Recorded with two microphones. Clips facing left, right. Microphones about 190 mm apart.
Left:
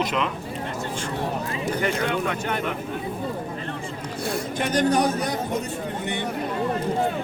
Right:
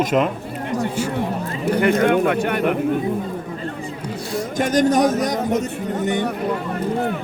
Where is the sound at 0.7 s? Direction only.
15° right (ahead or behind).